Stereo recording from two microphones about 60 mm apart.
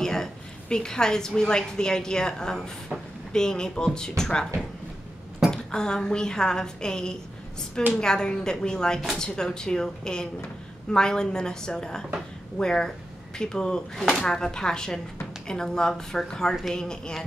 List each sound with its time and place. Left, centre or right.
0.0 s a woman's voice: centre
5.5 s speech: centre
13.9 s speech: centre